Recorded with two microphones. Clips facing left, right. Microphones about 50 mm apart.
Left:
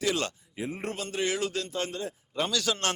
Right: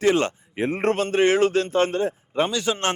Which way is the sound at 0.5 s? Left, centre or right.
Right.